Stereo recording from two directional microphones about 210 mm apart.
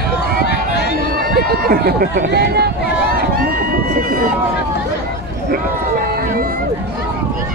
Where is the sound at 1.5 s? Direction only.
45° right (ahead or behind).